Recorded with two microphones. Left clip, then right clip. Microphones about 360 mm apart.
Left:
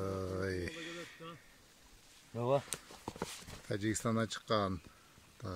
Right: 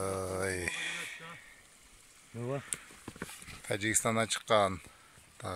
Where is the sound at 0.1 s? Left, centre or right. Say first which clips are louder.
Right 4 dB; right.